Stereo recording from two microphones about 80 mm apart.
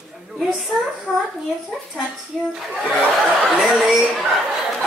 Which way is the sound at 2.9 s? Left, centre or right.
Centre.